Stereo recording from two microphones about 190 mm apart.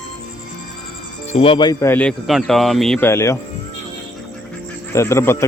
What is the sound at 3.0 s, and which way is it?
Speech, 15° left (ahead or behind).